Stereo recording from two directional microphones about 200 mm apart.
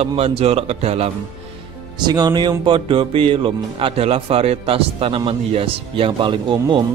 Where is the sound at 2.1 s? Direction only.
20° right (ahead or behind).